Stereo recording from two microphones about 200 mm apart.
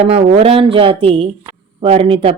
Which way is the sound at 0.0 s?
30° right (ahead or behind).